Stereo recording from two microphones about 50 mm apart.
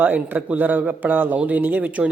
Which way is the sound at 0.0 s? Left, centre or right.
Right.